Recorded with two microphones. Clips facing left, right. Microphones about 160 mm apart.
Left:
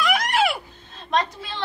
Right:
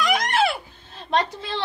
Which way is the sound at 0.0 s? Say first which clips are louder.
Even; 5° left (ahead or behind).